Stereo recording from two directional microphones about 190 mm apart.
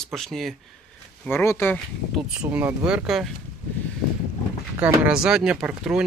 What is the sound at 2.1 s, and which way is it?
Speech, 5° right (ahead or behind).